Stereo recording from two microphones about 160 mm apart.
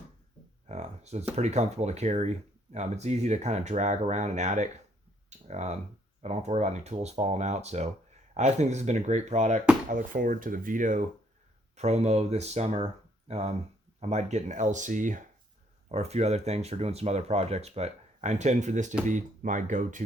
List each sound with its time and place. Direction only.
0.7 s a sound: 45° right (ahead or behind)
1.4 s speech: 45° right (ahead or behind)
11.8 s speech: 45° right (ahead or behind)
15.9 s speech: 45° right (ahead or behind)